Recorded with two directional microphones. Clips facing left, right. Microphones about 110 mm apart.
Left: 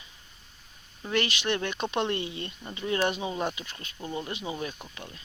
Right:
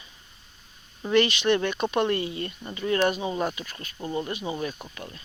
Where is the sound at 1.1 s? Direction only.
15° left (ahead or behind).